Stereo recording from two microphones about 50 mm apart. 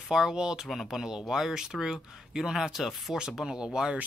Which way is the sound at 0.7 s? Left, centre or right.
Centre.